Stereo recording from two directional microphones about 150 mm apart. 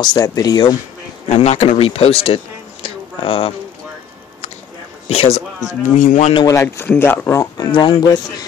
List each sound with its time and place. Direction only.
0.0 s speech: 25° left (ahead or behind)
1.3 s a man's voice: 45° left (ahead or behind)
5.0 s speech: 40° left (ahead or behind)
5.7 s speech: 55° left (ahead or behind)
6.4 s speech: 20° left (ahead or behind)
7.5 s speech: 30° left (ahead or behind)